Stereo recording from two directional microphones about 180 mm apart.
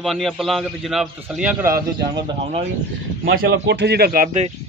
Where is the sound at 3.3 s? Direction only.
65° right (ahead or behind).